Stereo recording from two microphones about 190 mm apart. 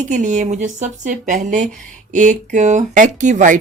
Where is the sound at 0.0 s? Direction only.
40° right (ahead or behind).